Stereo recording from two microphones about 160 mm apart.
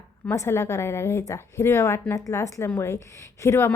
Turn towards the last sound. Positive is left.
turn(degrees=15)  # may be behind; listen again after turning